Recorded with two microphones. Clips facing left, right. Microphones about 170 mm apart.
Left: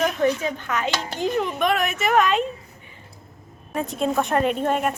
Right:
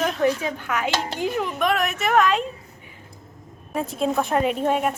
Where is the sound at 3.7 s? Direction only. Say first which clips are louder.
Even; centre (ahead or behind).